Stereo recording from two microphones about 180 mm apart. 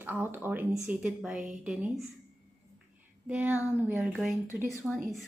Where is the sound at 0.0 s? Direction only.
10° right (ahead or behind).